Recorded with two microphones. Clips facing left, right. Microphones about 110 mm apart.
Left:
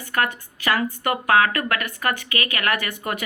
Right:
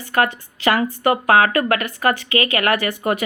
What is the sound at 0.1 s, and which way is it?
Speech, 30° right (ahead or behind).